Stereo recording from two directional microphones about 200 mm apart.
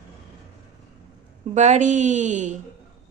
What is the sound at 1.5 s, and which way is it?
A woman's voice, 35° right (ahead or behind).